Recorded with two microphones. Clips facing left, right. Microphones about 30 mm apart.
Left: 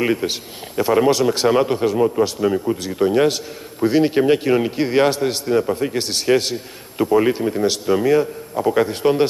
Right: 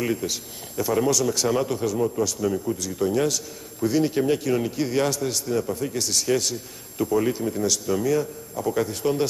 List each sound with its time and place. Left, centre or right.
0.0 s a man's voice: left